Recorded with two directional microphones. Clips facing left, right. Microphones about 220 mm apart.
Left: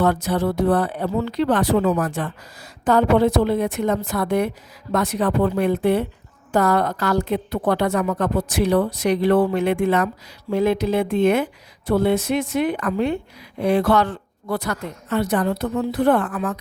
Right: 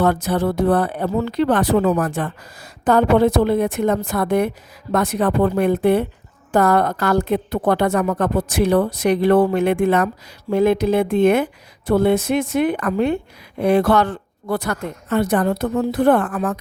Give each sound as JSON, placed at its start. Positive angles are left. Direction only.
{"t": 0.0, "sound": "speech", "side_deg": -50}